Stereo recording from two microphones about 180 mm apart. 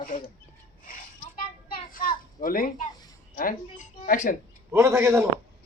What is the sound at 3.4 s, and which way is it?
Speech, 50° left (ahead or behind).